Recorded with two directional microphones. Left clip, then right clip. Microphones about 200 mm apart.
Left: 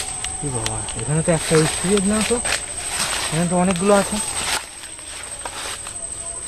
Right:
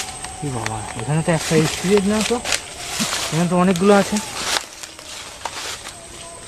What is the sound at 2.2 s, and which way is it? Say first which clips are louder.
Speech: even; 25° right (ahead or behind).